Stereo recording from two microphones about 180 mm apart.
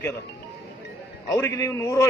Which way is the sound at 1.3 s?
15° left (ahead or behind).